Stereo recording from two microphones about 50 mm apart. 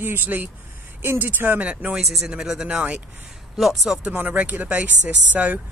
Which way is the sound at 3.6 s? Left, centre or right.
Centre.